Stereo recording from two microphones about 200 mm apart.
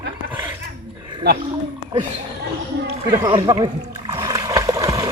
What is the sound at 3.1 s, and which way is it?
Splash, 20° right (ahead or behind).